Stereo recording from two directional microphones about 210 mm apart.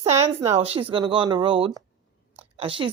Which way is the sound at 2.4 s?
25° right (ahead or behind).